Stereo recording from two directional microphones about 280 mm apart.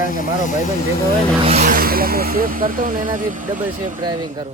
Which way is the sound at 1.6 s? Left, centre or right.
Right.